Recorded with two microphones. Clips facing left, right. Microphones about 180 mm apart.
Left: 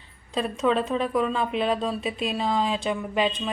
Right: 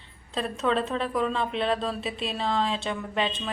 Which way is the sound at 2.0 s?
30° right (ahead or behind).